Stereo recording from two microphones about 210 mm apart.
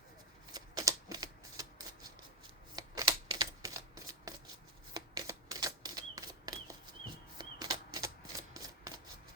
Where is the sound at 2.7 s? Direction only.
20° right (ahead or behind).